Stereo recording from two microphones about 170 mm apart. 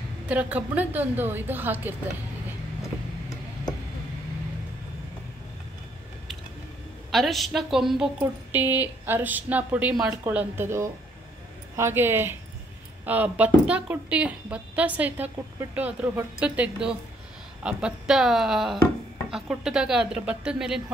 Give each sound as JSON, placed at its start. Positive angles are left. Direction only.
{"t": 0.3, "sound": "a woman's voice", "side_deg": -10}
{"t": 2.8, "sound": "tick-tock", "side_deg": 20}
{"t": 7.1, "sound": "a woman's voice", "side_deg": 0}